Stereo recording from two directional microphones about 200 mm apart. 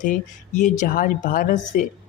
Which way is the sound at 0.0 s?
40° left (ahead or behind).